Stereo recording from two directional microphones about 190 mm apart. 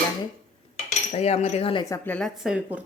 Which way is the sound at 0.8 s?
35° left (ahead or behind).